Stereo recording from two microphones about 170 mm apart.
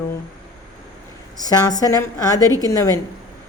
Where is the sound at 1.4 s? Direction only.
20° left (ahead or behind).